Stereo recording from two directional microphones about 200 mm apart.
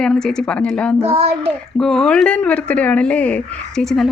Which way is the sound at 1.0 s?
30° right (ahead or behind).